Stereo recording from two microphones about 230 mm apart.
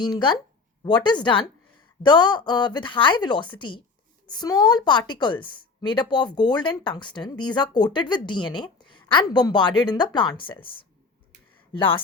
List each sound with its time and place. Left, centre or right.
0.0 s a woman's voice: centre
11.7 s speech: left